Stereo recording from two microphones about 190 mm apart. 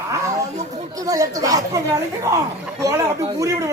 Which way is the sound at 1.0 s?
20° right (ahead or behind).